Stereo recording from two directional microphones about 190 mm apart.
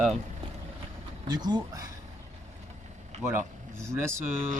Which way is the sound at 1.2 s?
20° right (ahead or behind).